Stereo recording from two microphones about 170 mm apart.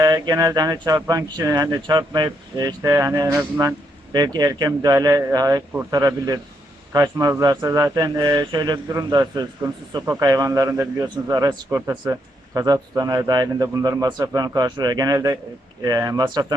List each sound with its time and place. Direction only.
0.0 s speech: 20° right (ahead or behind)